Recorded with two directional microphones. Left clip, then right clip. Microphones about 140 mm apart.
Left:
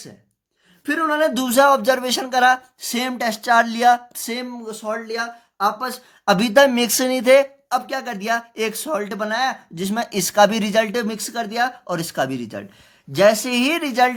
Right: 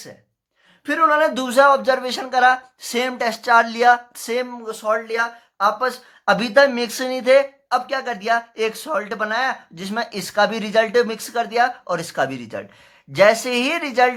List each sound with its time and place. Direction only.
0.9 s speech: 35° left (ahead or behind)